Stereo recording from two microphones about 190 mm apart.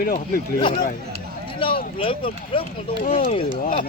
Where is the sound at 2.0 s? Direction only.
30° left (ahead or behind).